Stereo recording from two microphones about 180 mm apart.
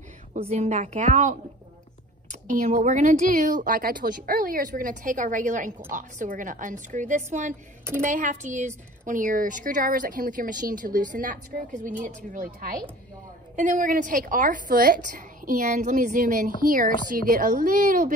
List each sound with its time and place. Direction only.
0.3 s a woman's voice: 35° right (ahead or behind)
2.4 s a woman's voice: 45° right (ahead or behind)